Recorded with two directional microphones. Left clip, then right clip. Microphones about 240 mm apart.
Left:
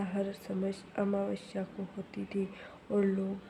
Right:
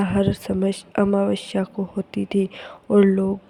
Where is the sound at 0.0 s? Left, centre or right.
Right.